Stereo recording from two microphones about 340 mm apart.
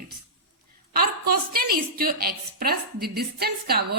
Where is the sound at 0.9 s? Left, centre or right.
Right.